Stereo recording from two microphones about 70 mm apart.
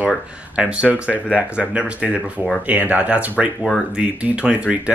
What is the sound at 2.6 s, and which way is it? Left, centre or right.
Speech, right.